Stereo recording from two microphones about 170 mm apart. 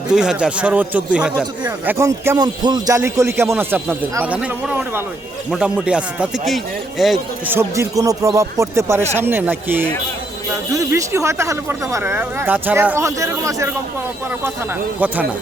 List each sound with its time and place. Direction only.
0.1 s speech: 5° right (ahead or behind)
7.5 s speech: 15° right (ahead or behind)
15.0 s speech: 10° right (ahead or behind)